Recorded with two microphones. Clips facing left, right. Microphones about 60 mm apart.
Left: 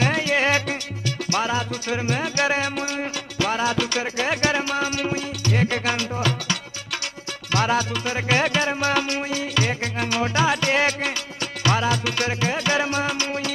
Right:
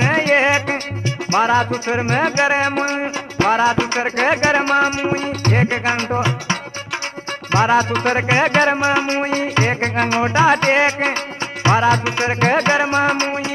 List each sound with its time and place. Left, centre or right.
0.0 s music: right
2.3 s music: right
7.9 s music: right
8.3 s music: right
8.8 s music: right
12.7 s music: right